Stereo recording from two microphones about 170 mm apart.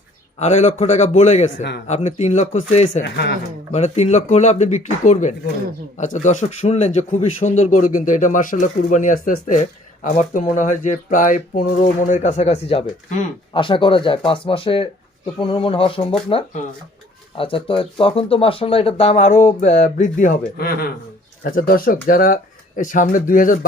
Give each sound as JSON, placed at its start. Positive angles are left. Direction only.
{"t": 0.3, "sound": "speech", "side_deg": 40}
{"t": 3.0, "sound": "speech", "side_deg": 80}
{"t": 3.7, "sound": "speech", "side_deg": 40}
{"t": 13.5, "sound": "speech", "side_deg": 30}